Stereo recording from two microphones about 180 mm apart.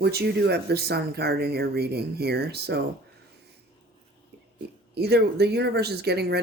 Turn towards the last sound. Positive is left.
turn(degrees=-65)  # may be behind; listen again after turning